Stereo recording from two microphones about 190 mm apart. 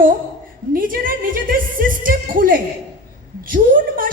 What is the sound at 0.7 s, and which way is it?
Speech, 50° right (ahead or behind).